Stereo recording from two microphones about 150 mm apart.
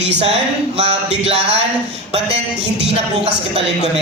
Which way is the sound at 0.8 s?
45° right (ahead or behind).